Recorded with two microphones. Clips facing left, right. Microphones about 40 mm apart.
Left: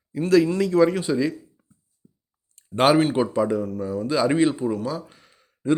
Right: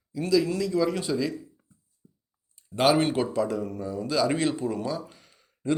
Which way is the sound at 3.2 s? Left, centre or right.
Left.